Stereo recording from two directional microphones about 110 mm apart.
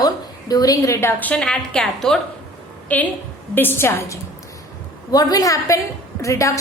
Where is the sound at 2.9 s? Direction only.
15° left (ahead or behind).